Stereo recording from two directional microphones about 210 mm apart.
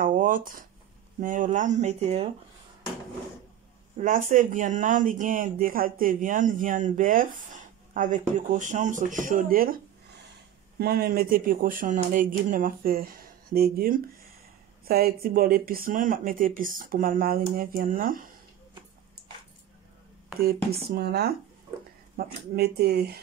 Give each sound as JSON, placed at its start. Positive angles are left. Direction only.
{"t": 0.0, "sound": "a sound", "side_deg": -40}
{"t": 1.2, "sound": "speech", "side_deg": -40}
{"t": 3.9, "sound": "speech", "side_deg": -40}
{"t": 10.8, "sound": "speech", "side_deg": -50}
{"t": 20.9, "sound": "speech", "side_deg": -50}